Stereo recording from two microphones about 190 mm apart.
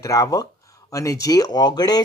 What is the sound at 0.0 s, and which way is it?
Speech, 15° left (ahead or behind).